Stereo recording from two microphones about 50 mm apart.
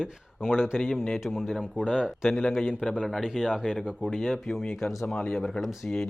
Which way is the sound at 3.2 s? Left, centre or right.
Centre.